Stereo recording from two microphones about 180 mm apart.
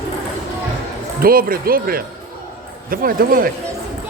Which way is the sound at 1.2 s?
55° right (ahead or behind).